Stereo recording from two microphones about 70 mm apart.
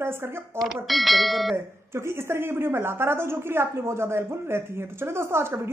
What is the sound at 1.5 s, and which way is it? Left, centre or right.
Speech, right.